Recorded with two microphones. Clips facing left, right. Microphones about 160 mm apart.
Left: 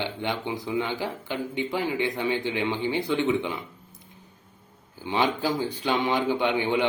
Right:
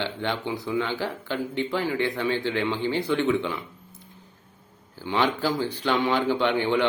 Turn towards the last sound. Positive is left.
turn(degrees=15)  # may be behind; listen again after turning